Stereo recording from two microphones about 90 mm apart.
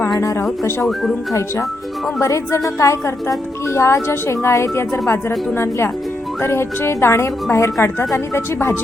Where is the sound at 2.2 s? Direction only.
35° left (ahead or behind).